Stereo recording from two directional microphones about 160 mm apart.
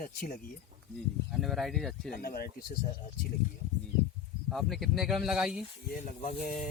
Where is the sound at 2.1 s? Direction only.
65° left (ahead or behind).